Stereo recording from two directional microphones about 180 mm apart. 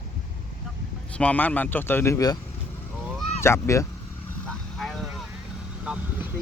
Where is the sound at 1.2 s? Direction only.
10° left (ahead or behind).